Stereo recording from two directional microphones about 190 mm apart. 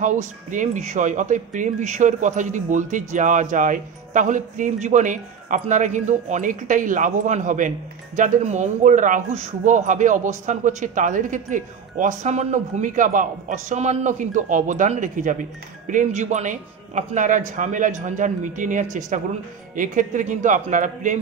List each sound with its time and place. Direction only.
0.0 s speech: 40° right (ahead or behind)